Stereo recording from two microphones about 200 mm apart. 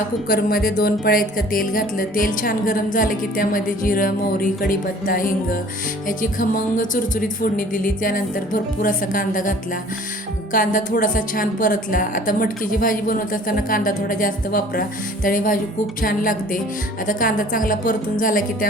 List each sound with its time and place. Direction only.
0.3 s a woman's voice: 50° left (ahead or behind)